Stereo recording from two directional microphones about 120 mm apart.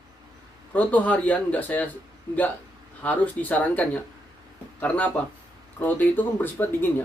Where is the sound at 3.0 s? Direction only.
10° left (ahead or behind).